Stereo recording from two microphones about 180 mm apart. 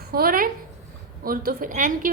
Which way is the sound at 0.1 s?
55° right (ahead or behind).